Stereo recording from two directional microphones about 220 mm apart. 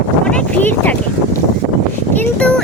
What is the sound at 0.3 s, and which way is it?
Speech, 5° left (ahead or behind).